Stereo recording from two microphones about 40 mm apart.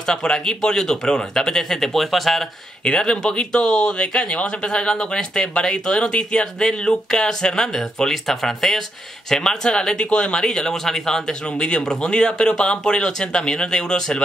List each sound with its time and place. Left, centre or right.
0.0 s speech: centre
2.8 s speech: centre